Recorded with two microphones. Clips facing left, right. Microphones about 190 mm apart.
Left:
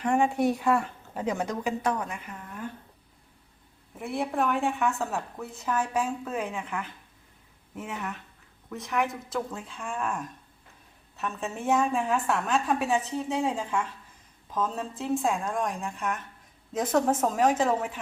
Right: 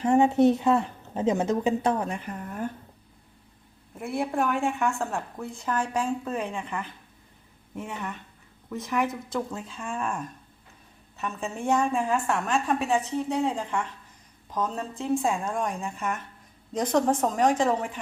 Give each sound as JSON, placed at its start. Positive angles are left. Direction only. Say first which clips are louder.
{"t": 0.0, "sound": "a woman's voice", "louder": "right 5 dB", "side_deg": -25}
{"t": 3.9, "sound": "a woman's voice", "louder": "right 1 dB", "side_deg": 0}